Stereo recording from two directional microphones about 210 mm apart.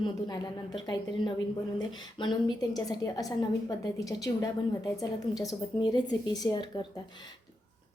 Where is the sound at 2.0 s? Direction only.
20° left (ahead or behind).